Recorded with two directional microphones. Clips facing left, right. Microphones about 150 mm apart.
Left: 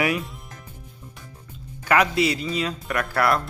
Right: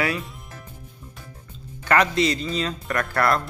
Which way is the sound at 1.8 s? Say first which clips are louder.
Even; 10° left (ahead or behind).